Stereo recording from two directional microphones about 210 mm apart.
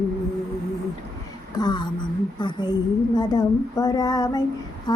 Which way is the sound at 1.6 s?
20° left (ahead or behind).